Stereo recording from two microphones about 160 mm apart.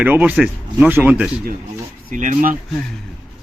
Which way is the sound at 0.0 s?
10° right (ahead or behind).